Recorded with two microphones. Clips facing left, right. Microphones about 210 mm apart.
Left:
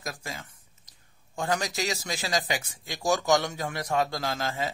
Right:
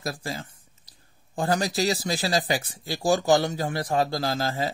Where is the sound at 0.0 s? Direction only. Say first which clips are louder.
Right 6 dB; 35° right (ahead or behind).